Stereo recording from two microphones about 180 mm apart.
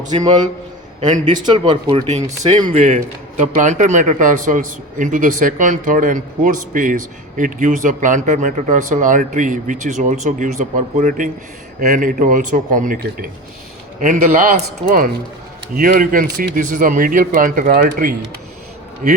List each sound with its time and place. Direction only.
1.0 s speech: 45° right (ahead or behind)
1.5 s speech: 25° right (ahead or behind)
2.6 s speech: 40° right (ahead or behind)